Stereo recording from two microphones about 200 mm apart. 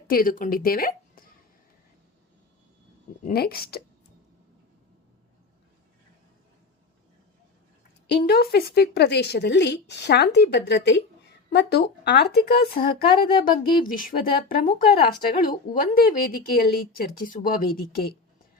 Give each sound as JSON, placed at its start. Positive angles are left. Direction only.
{"t": 0.1, "sound": "a woman's voice", "side_deg": 45}
{"t": 3.2, "sound": "a woman's voice", "side_deg": 50}
{"t": 8.0, "sound": "a woman's voice", "side_deg": 55}